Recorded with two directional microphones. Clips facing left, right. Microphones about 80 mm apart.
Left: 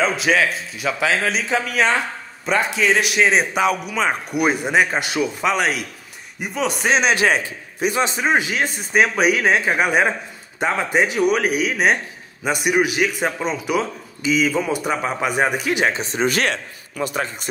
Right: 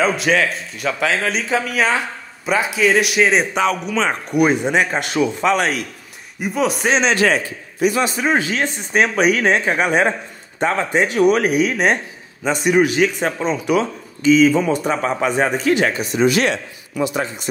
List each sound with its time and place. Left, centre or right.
0.0 s a man's voice: centre; by 17.5 s left